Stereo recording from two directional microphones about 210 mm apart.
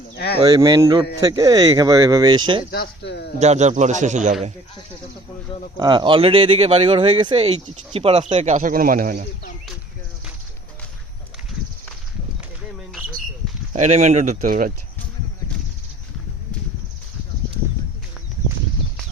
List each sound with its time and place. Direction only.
0.3 s speech: 20° right (ahead or behind)
2.7 s speech: 50° left (ahead or behind)
3.3 s speech: 30° right (ahead or behind)
5.7 s a man's voice: 20° right (ahead or behind); by 9.2 s 40° right (ahead or behind)
13.7 s speech: 35° right (ahead or behind)